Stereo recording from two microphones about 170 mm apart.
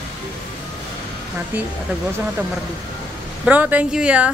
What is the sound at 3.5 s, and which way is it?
Speech, 10° right (ahead or behind).